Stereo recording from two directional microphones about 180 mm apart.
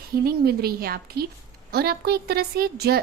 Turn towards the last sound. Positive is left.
turn(degrees=-60)  # may be behind; listen again after turning